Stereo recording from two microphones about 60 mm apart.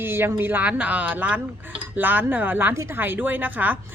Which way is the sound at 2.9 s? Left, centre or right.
Right.